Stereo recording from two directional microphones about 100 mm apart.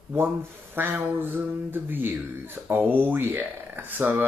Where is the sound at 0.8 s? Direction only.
20° right (ahead or behind).